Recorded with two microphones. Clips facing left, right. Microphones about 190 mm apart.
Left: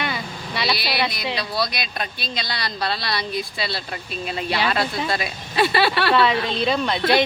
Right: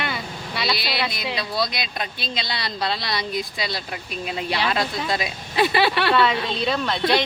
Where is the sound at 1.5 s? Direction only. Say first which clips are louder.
Even; 20° right (ahead or behind).